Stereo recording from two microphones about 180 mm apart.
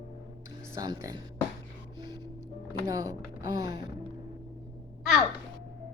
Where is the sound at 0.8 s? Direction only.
20° right (ahead or behind).